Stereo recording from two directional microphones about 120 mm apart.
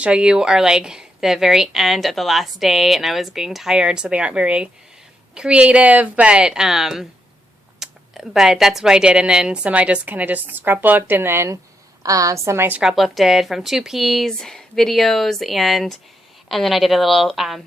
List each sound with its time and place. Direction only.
0.0 s a woman's voice: 10° right (ahead or behind)
12.8 s a woman's voice: 5° right (ahead or behind)